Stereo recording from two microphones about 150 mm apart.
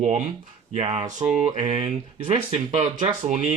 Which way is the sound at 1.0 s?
55° right (ahead or behind).